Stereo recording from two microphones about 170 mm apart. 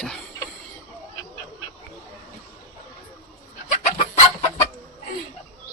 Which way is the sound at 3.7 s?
45° left (ahead or behind).